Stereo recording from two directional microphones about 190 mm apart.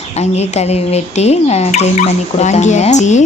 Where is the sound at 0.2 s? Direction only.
35° left (ahead or behind).